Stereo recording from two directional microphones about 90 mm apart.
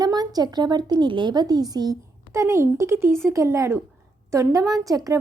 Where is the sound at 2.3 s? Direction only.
35° right (ahead or behind).